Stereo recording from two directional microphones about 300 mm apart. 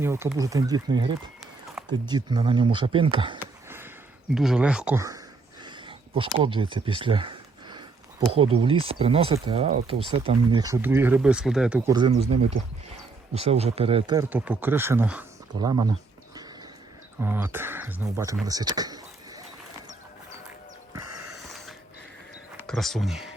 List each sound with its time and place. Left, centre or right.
0.0 s speech: centre
5.6 s a sound: centre
8.3 s speech: centre
15.6 s a sound: centre
17.2 s speech: centre
21.0 s snort: right
21.3 s wheeze: centre
22.5 s speech: centre